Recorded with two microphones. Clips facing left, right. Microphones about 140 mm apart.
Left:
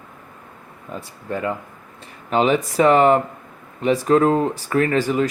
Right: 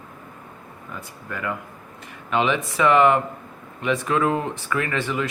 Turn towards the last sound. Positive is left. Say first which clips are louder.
# left 7 dB
turn(degrees=40)  # may be behind; listen again after turning